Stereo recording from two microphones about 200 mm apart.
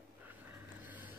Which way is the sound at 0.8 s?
10° right (ahead or behind).